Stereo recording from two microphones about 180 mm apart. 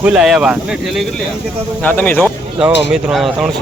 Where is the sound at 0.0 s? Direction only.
5° right (ahead or behind).